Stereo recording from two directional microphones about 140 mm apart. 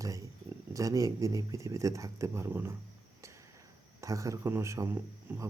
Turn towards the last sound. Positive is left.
turn(degrees=-20)  # may be behind; listen again after turning